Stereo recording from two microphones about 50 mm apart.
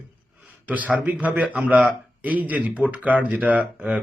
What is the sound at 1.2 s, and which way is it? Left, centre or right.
Speech, right.